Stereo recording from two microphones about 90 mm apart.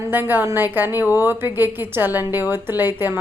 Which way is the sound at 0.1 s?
20° right (ahead or behind).